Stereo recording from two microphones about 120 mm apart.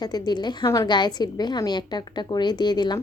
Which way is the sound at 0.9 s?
35° left (ahead or behind).